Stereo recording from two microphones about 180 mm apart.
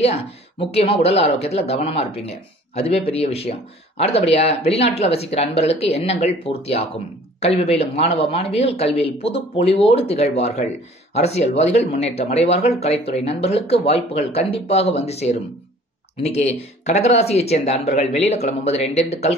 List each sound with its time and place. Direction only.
0.0 s speech: 35° left (ahead or behind)